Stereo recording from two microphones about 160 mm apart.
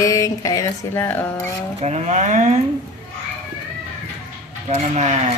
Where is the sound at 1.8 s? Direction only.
45° right (ahead or behind).